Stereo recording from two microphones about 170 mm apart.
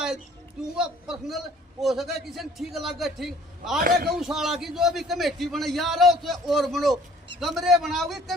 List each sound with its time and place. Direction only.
0.8 s a man's voice: 5° right (ahead or behind)
3.8 s a man's voice: 60° right (ahead or behind)
4.1 s a man's voice: centre (ahead or behind)